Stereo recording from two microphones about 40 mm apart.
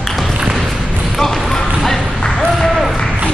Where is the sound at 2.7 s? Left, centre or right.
Centre.